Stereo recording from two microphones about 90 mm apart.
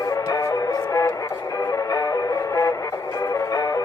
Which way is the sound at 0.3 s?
35° left (ahead or behind).